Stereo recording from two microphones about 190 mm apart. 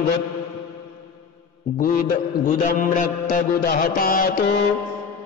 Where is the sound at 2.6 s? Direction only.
45° left (ahead or behind).